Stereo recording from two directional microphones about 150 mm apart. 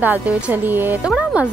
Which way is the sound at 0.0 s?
10° right (ahead or behind).